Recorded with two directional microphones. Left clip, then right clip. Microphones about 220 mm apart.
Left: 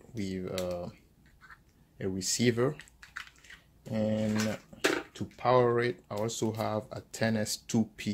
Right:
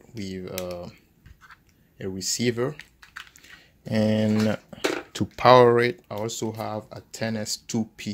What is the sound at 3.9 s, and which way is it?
Speech, 40° right (ahead or behind).